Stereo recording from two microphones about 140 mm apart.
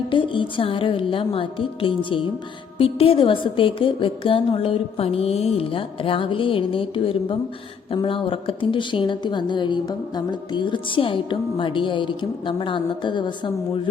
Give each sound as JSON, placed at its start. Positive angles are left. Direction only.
{"t": 0.1, "sound": "speech", "side_deg": 35}